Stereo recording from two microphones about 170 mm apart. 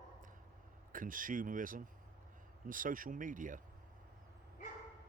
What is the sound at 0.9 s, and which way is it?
Speech, 50° right (ahead or behind).